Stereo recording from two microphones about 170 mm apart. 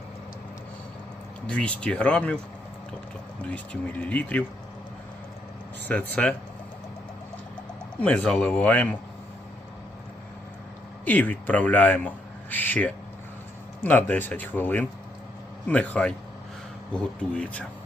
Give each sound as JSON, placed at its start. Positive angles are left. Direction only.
{"t": 1.5, "sound": "a man's voice", "side_deg": 5}
{"t": 3.5, "sound": "a man's voice", "side_deg": 10}
{"t": 5.9, "sound": "a man's voice", "side_deg": 10}
{"t": 7.9, "sound": "a man's voice", "side_deg": 10}
{"t": 11.0, "sound": "a man's voice", "side_deg": 10}